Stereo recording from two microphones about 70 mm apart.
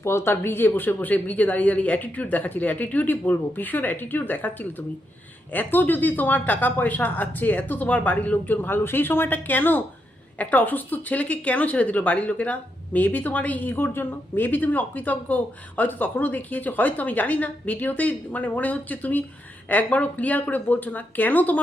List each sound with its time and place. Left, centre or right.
0.0 s speech: left
5.5 s speech: left